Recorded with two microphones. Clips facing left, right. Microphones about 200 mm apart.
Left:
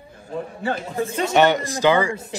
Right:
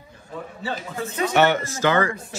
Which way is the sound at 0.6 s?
55° left (ahead or behind).